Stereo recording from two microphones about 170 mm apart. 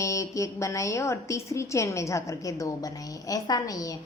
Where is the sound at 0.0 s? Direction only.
20° left (ahead or behind).